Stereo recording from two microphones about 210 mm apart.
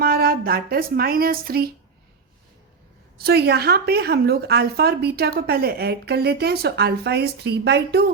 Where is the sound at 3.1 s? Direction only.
50° right (ahead or behind).